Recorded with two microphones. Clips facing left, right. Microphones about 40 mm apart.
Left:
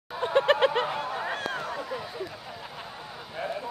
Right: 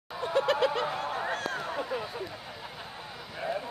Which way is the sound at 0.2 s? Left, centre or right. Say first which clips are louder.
Left 4 dB; left.